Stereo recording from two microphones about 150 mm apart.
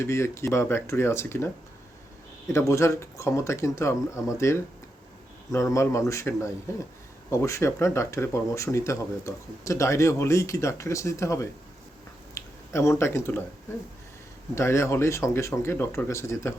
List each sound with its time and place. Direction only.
0.0 s speech: 20° left (ahead or behind)
2.5 s speech: 20° left (ahead or behind)
12.3 s a sound: 20° left (ahead or behind)
14.5 s speech: 15° left (ahead or behind)